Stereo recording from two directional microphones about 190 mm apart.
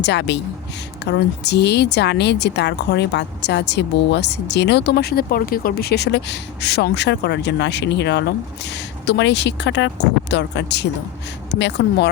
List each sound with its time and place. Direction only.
0.0 s speech: 65° left (ahead or behind)